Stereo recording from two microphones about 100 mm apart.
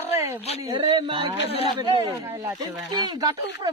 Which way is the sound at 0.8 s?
55° right (ahead or behind).